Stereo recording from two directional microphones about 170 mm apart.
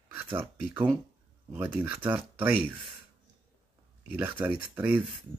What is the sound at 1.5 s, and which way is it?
Speech, 10° right (ahead or behind).